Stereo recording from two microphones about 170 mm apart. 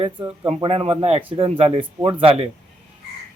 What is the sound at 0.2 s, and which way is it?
Speech, 10° right (ahead or behind).